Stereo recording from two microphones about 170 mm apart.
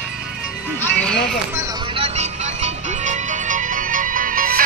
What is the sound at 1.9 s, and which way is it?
Music, 40° right (ahead or behind).